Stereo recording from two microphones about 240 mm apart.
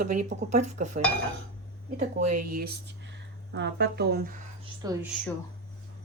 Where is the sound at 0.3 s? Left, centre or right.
Right.